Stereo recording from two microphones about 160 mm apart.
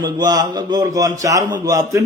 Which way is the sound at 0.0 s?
25° right (ahead or behind).